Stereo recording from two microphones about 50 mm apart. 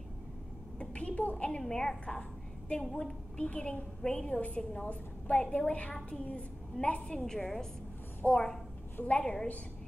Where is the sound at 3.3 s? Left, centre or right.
Left.